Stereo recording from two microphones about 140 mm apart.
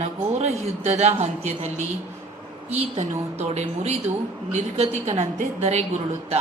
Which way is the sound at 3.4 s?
50° right (ahead or behind).